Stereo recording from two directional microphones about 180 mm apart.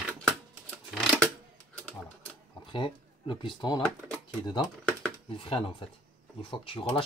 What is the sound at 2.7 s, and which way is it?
Speech, 30° left (ahead or behind).